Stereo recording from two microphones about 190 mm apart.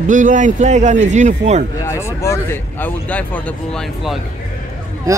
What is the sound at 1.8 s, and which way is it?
Speech, 15° left (ahead or behind).